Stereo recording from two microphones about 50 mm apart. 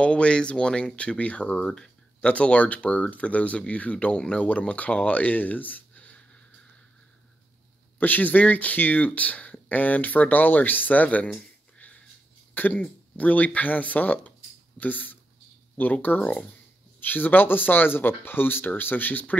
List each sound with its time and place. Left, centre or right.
0.0 s speech: left
1.6 s a sound: centre
2.3 s speech: left
8.0 s speech: left
12.5 s speech: left